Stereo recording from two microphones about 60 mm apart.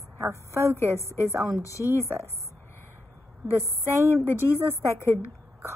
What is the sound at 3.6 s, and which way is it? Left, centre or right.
A woman's voice, left.